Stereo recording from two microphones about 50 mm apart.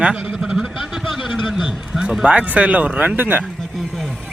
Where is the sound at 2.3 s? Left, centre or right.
Right.